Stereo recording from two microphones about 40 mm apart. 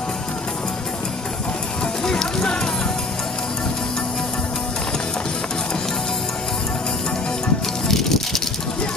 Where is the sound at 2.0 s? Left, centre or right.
Centre.